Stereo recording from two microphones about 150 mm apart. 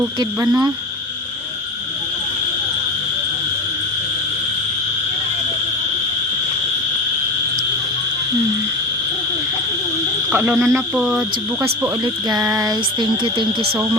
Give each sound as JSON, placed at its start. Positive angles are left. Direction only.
{"t": 10.3, "sound": "speech", "side_deg": -10}
{"t": 10.9, "sound": "cricket", "side_deg": -5}
{"t": 12.0, "sound": "speech", "side_deg": -25}